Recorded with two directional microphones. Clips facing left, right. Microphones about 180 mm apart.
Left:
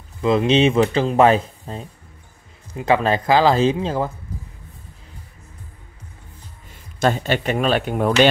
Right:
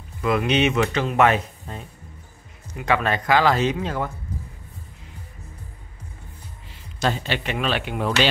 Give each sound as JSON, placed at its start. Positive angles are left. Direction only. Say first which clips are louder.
{"t": 0.2, "sound": "speech", "louder": "left 4 dB", "side_deg": 25}
{"t": 6.7, "sound": "speech", "louder": "left 5 dB", "side_deg": 50}